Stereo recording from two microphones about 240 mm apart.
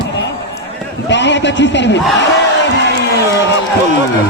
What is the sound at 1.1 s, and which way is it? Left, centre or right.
Speech, left.